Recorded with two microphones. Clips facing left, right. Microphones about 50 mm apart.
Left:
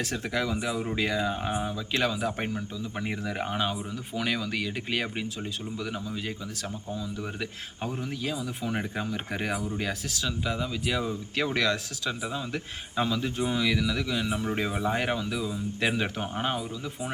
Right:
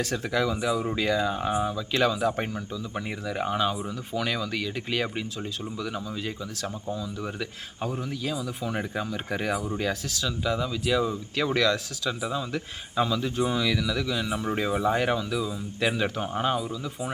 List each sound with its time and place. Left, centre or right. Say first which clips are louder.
0.0 s speech: right 3 dB; left
2.0 s speech: right 4 dB; centre
3.0 s speech: even; left; by 6.3 s centre
7.3 s speech: right 2 dB; centre
14.3 s speech: right 2 dB; centre